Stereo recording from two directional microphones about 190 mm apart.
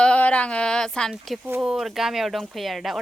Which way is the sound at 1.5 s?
10° right (ahead or behind).